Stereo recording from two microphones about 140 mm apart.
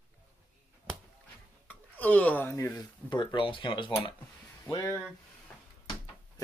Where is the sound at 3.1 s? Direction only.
35° left (ahead or behind).